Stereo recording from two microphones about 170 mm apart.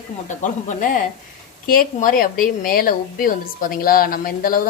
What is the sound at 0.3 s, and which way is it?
A woman's voice, 45° left (ahead or behind).